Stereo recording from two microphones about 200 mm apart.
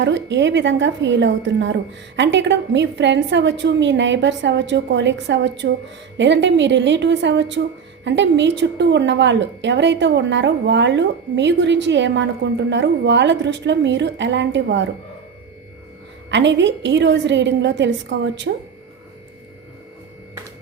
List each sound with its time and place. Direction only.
0.0 s a woman's voice: 65° right (ahead or behind)
16.3 s a woman's voice: 65° right (ahead or behind)